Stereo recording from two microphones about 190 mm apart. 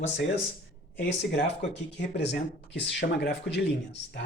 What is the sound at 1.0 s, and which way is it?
Speech, 65° left (ahead or behind).